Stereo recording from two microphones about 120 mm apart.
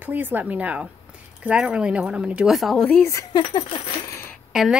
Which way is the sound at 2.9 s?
20° left (ahead or behind).